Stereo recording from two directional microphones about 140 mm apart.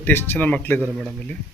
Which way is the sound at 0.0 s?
15° left (ahead or behind).